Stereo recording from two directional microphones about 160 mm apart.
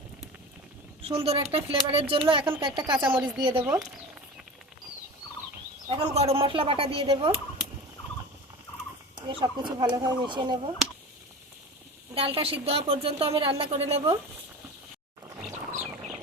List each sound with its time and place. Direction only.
1.0 s speech: 40° right (ahead or behind)
3.1 s speech: 10° right (ahead or behind)
3.3 s speech: 30° right (ahead or behind)
3.6 s speech: 15° right (ahead or behind)
5.9 s speech: 35° right (ahead or behind)
9.2 s speech: 30° right (ahead or behind)
12.1 s speech: 35° right (ahead or behind)